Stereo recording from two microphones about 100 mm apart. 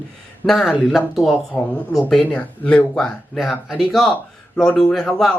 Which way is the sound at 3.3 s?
Centre (ahead or behind).